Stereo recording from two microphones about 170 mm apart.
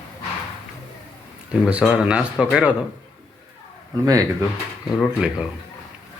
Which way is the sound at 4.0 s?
20° right (ahead or behind).